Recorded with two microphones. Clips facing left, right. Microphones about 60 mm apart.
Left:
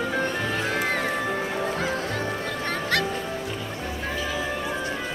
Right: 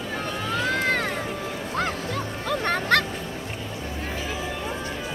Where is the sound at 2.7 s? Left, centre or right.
Right.